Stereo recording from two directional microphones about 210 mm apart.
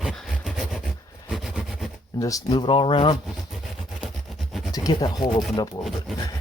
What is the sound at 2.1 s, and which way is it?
Speech, 15° left (ahead or behind).